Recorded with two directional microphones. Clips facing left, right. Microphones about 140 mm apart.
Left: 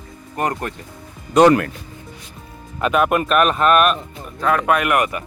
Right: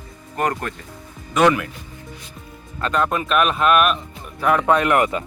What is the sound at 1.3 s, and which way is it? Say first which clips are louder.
Speech: left 5 dB; 35° left (ahead or behind).